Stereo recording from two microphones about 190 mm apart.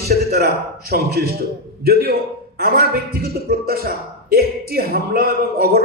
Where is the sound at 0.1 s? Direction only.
55° right (ahead or behind).